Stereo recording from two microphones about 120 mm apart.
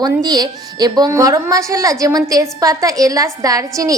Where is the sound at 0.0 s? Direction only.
30° right (ahead or behind).